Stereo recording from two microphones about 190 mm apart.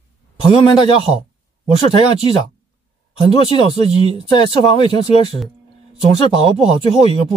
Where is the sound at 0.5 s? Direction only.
25° left (ahead or behind).